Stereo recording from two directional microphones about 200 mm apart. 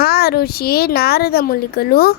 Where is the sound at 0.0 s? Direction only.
50° left (ahead or behind).